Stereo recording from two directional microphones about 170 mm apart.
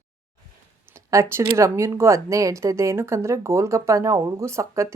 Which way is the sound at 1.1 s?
15° right (ahead or behind).